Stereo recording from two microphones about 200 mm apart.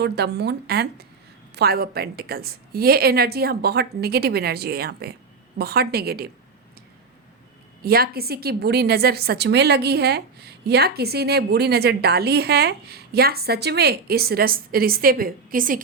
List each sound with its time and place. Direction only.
0.0 s a woman's voice: 55° right (ahead or behind)
7.8 s a woman's voice: 50° right (ahead or behind)